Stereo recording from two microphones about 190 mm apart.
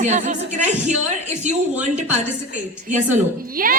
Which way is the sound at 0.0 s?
40° right (ahead or behind).